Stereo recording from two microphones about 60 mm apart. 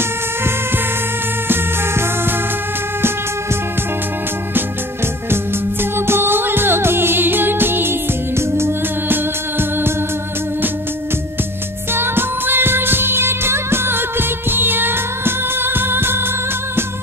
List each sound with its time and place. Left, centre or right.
1.5 s music: right
5.3 s music: right
11.9 s music: right